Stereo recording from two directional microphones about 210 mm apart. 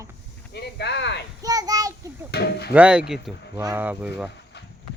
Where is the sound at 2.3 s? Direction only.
50° left (ahead or behind).